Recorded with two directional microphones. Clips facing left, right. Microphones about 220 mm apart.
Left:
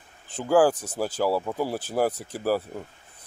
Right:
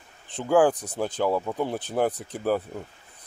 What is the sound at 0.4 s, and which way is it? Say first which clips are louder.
Speech: even; 5° left (ahead or behind).